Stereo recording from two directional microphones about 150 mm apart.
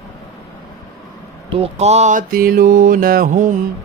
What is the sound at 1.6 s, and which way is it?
Mantra, 45° right (ahead or behind).